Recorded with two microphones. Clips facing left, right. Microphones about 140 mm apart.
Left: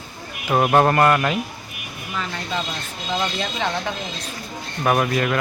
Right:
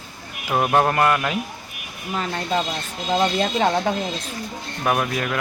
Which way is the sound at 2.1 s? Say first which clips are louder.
Right 4 dB; 40° right (ahead or behind).